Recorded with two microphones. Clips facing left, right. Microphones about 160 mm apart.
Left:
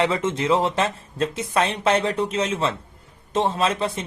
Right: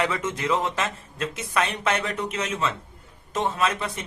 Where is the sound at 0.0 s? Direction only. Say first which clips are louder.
Left 4 dB; 30° left (ahead or behind).